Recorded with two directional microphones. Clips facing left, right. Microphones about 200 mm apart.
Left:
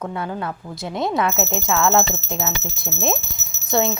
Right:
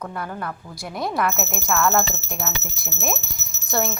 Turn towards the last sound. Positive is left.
turn(degrees=20)  # may be behind; listen again after turning